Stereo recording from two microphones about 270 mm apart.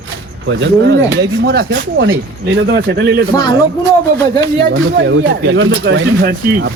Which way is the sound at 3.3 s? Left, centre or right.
Centre.